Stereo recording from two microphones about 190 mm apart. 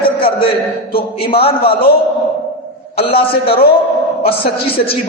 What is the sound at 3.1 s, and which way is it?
A man's voice, 30° left (ahead or behind).